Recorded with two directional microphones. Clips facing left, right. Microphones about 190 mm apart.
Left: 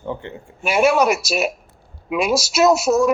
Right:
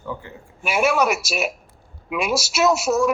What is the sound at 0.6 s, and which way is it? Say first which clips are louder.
A woman's voice: left 4 dB; 40° left (ahead or behind).